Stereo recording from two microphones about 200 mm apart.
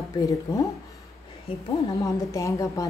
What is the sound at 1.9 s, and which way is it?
Speech, 15° left (ahead or behind).